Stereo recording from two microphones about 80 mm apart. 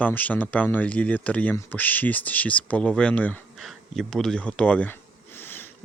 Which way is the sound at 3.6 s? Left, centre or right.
Centre.